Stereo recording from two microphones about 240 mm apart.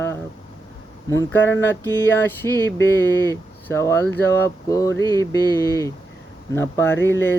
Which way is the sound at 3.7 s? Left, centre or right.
Centre.